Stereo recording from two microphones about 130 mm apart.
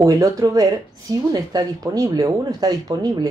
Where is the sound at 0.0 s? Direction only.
25° right (ahead or behind).